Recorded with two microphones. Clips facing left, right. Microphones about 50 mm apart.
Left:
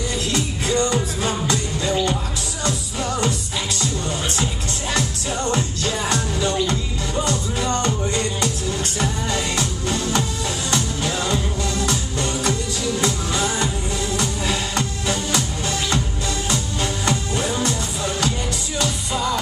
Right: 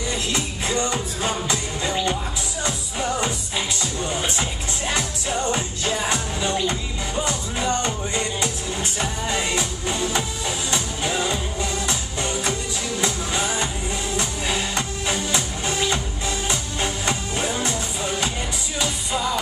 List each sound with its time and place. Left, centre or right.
0.3 s music: right